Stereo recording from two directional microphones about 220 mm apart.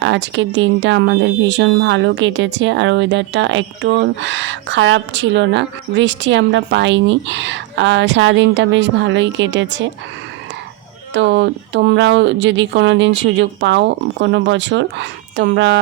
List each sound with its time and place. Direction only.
0.0 s speech: 55° right (ahead or behind)
11.1 s speech: 55° right (ahead or behind)